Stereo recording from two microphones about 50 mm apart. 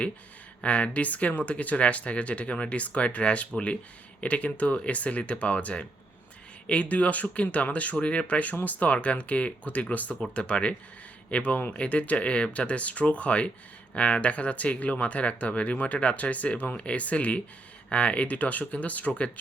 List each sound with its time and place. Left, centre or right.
0.6 s speech: left